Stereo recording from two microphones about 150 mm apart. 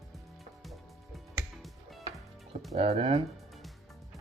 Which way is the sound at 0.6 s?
Centre (ahead or behind).